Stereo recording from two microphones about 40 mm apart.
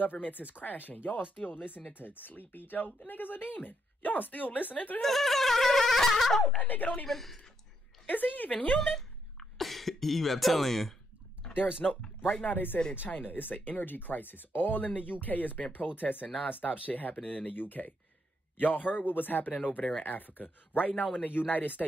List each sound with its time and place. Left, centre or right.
0.0 s speech: left
5.0 s a sound: centre
6.4 s speech: left
7.1 s speech: centre
8.1 s speech: left
8.8 s cough: centre
11.8 s speech: left
12.4 s speech: left
19.5 s speech: left